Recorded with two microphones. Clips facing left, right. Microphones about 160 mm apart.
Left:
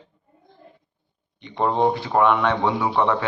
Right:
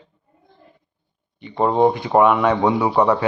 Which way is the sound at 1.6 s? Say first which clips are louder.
Right 4 dB; 5° right (ahead or behind).